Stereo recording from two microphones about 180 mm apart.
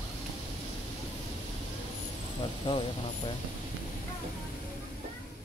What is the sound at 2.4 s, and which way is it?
Speech, 30° left (ahead or behind).